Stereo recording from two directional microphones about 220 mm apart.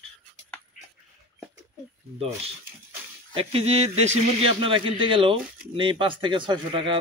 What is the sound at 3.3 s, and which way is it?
A man's voice, 25° right (ahead or behind).